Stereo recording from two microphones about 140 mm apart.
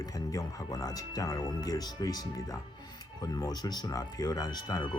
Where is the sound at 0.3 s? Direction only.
25° left (ahead or behind).